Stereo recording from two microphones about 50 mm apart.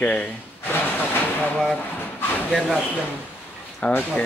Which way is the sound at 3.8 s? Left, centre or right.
Left.